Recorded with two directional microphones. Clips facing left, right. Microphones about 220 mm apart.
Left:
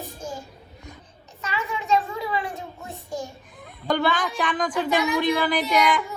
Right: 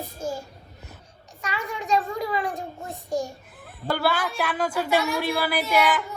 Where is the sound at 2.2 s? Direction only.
45° right (ahead or behind).